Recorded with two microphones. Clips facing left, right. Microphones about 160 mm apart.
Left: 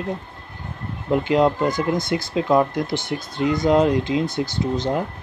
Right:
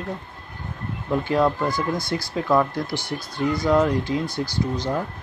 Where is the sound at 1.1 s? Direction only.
20° left (ahead or behind).